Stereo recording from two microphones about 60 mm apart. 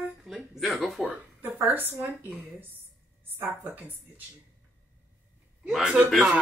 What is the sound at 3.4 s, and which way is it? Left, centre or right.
Speech, right.